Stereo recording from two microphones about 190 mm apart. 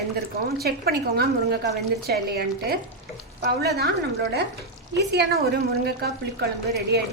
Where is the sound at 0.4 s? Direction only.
55° right (ahead or behind).